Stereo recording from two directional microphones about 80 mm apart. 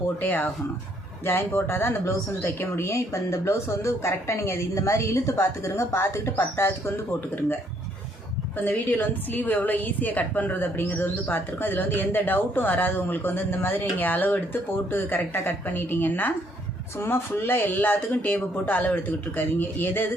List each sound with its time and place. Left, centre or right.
0.2 s a woman's voice: left
8.5 s a woman's voice: left